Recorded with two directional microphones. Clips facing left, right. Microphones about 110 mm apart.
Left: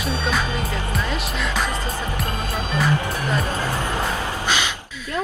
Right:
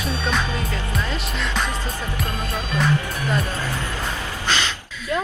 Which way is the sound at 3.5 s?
20° left (ahead or behind).